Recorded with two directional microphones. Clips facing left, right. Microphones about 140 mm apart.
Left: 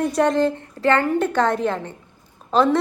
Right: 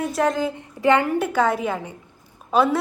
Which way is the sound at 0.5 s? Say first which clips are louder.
Right 1 dB; 15° right (ahead or behind).